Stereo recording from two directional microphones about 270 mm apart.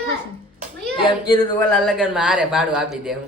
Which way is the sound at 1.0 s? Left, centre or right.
Centre.